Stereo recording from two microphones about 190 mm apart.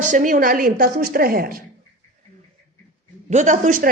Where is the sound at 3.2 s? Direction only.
40° right (ahead or behind).